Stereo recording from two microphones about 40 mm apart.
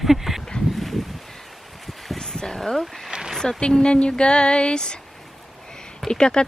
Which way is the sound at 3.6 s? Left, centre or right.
Left.